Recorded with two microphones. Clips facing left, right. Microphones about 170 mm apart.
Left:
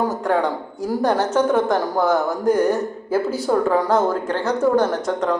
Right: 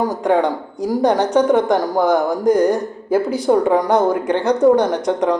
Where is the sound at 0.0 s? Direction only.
15° right (ahead or behind).